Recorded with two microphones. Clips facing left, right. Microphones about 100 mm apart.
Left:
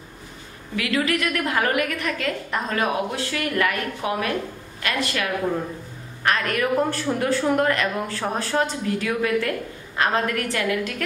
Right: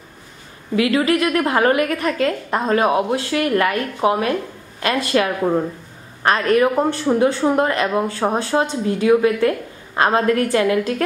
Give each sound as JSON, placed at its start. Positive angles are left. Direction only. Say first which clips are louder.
{"t": 0.7, "sound": "a woman's voice", "louder": "right 7 dB", "side_deg": -30}